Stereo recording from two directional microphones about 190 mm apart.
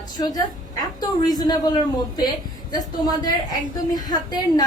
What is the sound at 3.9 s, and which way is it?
Speech, 20° left (ahead or behind).